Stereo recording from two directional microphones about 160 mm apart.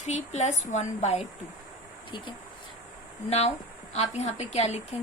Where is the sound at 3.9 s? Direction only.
45° left (ahead or behind).